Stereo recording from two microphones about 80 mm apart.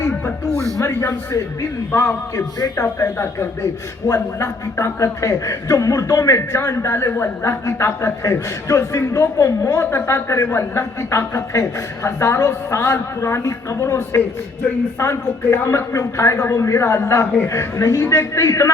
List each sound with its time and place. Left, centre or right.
0.8 s a man's voice: left
4.1 s a man's voice: left